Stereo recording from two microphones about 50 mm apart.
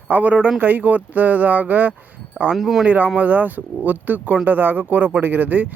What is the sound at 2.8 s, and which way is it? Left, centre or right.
Speech, right.